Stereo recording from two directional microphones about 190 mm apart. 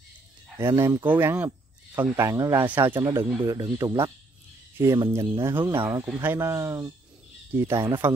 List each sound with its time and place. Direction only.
0.6 s speech: 15° right (ahead or behind)
5.4 s speech: 10° right (ahead or behind)